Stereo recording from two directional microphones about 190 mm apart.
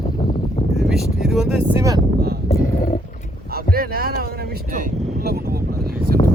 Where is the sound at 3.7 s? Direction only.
50° right (ahead or behind).